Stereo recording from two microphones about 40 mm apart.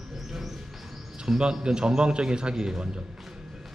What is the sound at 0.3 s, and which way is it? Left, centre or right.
Bird, centre.